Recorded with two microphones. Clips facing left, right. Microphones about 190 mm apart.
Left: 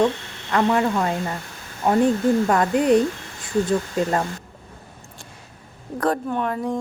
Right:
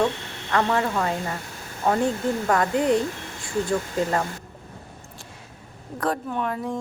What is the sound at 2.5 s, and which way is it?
Speech, 20° left (ahead or behind).